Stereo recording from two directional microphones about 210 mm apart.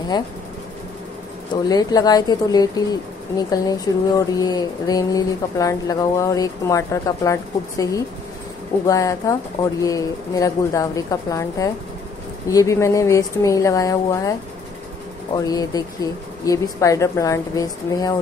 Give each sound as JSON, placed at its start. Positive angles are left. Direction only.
{"t": 1.5, "sound": "speech", "side_deg": 20}
{"t": 15.3, "sound": "speech", "side_deg": 15}